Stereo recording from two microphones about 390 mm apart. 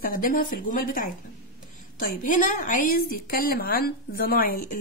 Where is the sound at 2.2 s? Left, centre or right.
Centre.